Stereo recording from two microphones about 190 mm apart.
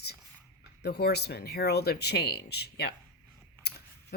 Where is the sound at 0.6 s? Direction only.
60° left (ahead or behind).